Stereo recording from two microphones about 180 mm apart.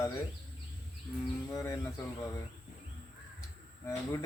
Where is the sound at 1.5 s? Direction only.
15° left (ahead or behind).